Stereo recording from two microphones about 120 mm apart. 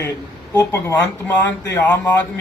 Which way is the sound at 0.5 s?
25° left (ahead or behind).